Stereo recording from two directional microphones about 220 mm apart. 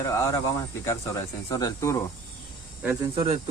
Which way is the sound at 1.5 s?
15° left (ahead or behind).